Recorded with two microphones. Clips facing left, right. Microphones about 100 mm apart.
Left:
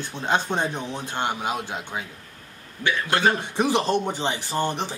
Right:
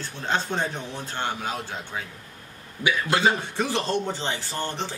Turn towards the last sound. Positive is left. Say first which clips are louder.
# left 5 dB
turn(degrees=15)  # may be behind; listen again after turning